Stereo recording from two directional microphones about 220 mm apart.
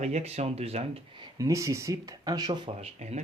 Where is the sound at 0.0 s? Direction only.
30° right (ahead or behind).